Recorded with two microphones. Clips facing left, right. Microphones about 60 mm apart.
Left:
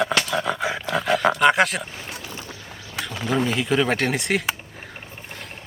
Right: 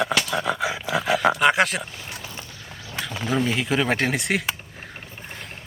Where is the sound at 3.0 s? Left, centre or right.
Centre.